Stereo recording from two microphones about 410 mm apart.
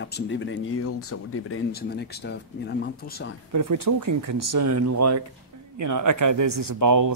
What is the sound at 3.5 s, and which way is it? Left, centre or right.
Speech, right.